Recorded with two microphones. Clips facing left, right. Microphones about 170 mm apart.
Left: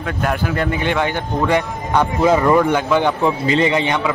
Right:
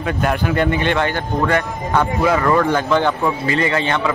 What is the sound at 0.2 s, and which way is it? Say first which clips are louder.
Speech: right 1 dB; centre (ahead or behind).